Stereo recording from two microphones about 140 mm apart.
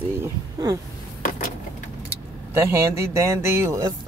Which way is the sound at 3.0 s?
20° right (ahead or behind).